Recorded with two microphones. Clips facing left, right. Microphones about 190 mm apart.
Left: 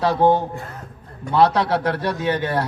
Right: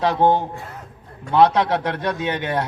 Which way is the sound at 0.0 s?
20° right (ahead or behind).